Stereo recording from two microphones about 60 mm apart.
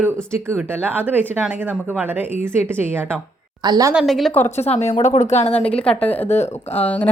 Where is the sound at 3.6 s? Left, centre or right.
Right.